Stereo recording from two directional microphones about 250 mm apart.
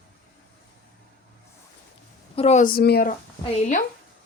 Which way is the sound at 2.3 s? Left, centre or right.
Left.